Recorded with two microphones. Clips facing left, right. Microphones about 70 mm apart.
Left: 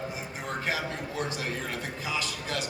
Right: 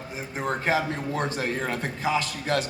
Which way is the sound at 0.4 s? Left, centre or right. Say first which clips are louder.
Right 7 dB; right.